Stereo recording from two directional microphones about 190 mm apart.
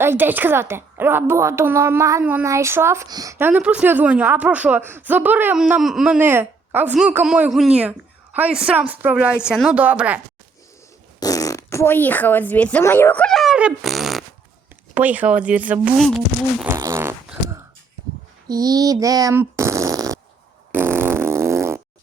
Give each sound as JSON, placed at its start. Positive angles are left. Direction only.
{"t": 0.0, "sound": "a woman's voice", "side_deg": -10}
{"t": 11.2, "sound": "a woman's voice", "side_deg": 20}
{"t": 16.6, "sound": "fart", "side_deg": -15}
{"t": 18.4, "sound": "speech", "side_deg": -20}
{"t": 20.7, "sound": "fart", "side_deg": -10}